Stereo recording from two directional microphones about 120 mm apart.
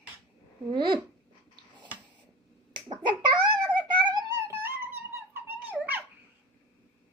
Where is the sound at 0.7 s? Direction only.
40° right (ahead or behind).